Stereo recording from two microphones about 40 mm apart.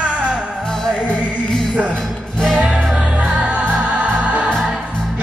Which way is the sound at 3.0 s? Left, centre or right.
Right.